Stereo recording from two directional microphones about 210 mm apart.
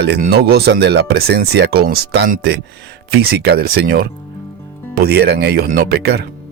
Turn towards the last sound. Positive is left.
turn(degrees=-50)  # may be behind; listen again after turning